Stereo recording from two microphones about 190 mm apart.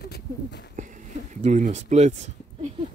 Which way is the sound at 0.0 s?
60° left (ahead or behind).